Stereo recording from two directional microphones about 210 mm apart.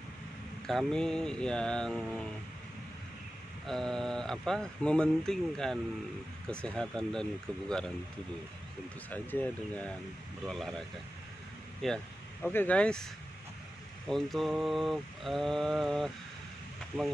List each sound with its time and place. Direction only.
0.7 s speech: centre (ahead or behind)
3.6 s speech: centre (ahead or behind)
9.1 s speech: 10° left (ahead or behind)
11.8 s speech: centre (ahead or behind)